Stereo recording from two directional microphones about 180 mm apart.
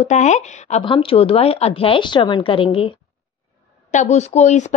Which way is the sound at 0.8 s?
30° left (ahead or behind).